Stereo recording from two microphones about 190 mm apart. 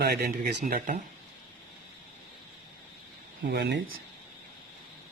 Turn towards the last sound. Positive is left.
turn(degrees=-65)  # may be behind; listen again after turning